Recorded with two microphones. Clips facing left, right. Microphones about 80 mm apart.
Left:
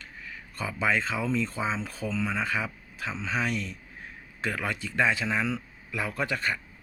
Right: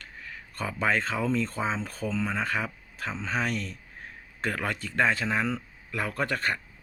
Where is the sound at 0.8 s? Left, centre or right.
Right.